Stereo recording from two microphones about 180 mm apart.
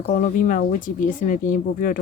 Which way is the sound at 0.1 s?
50° left (ahead or behind).